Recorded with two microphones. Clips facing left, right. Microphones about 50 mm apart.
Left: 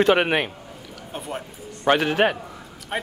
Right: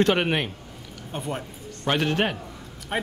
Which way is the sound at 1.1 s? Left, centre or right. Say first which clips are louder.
Right 1 dB; centre.